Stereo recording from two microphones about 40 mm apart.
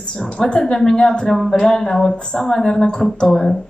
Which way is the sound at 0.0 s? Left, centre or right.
Left.